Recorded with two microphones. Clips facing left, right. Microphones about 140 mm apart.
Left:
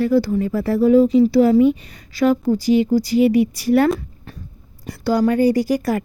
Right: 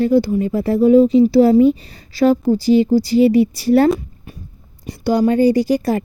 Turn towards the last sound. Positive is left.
turn(degrees=-25)  # may be behind; listen again after turning